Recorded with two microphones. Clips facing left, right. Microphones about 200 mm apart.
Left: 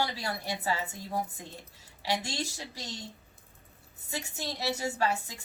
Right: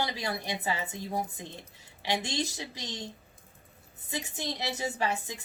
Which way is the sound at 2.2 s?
20° right (ahead or behind).